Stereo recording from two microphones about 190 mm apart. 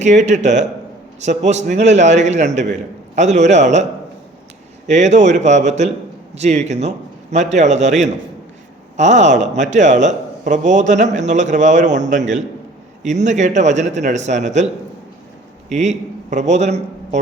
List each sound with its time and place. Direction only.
0.0 s speech: 40° right (ahead or behind)
4.9 s a man's voice: 40° right (ahead or behind)
15.7 s a man's voice: 35° right (ahead or behind)